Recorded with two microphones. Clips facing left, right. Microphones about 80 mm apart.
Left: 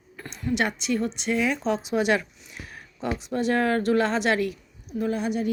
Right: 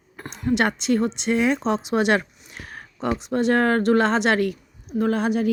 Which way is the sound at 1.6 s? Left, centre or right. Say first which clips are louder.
Right 3 dB; right.